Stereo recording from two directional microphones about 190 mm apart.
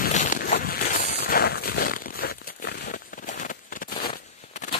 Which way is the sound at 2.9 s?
45° left (ahead or behind).